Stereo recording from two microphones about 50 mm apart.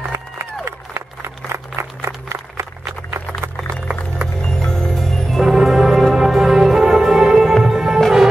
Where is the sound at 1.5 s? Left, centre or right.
Right.